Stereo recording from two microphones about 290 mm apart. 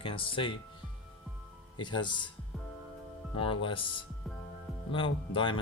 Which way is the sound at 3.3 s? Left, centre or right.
Centre.